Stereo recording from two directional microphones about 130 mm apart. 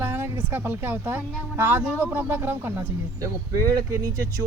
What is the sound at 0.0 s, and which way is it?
Speech, 15° right (ahead or behind).